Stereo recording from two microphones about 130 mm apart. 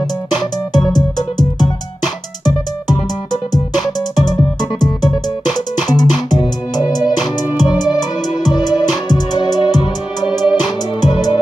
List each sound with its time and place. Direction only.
0.7 s music: 30° left (ahead or behind)
4.1 s music: 30° left (ahead or behind)